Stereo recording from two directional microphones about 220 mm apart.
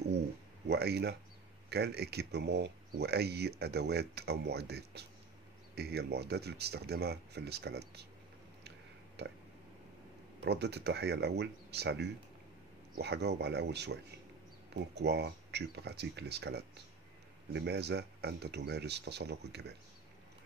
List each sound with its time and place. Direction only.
0.7 s speech: 45° right (ahead or behind)
8.6 s a sound: 50° right (ahead or behind)
10.4 s speech: 50° right (ahead or behind)
15.0 s speech: 50° right (ahead or behind)